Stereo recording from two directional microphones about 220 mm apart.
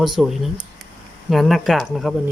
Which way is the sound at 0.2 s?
Centre (ahead or behind).